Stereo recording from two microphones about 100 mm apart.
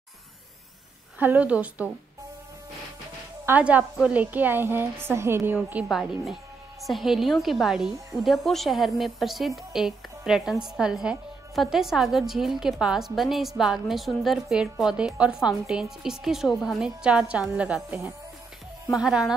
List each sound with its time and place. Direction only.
1.2 s a woman's voice: 15° right (ahead or behind)
3.4 s a woman's voice: 15° right (ahead or behind)
5.9 s a woman's voice: centre (ahead or behind)